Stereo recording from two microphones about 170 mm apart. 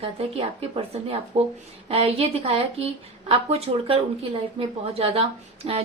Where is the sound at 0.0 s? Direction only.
35° right (ahead or behind).